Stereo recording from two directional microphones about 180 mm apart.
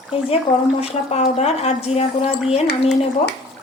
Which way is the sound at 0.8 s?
35° left (ahead or behind).